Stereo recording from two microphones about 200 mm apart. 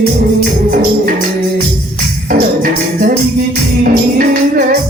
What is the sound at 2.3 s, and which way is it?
Music, 45° right (ahead or behind).